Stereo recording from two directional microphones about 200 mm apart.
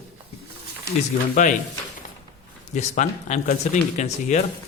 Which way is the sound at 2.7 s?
35° left (ahead or behind).